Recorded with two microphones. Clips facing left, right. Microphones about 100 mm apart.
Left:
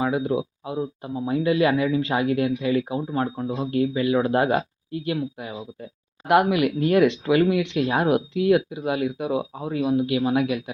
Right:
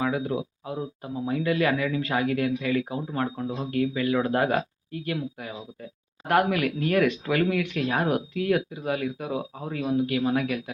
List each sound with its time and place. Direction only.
0.0 s speech: 15° left (ahead or behind)
6.2 s speech: 15° left (ahead or behind)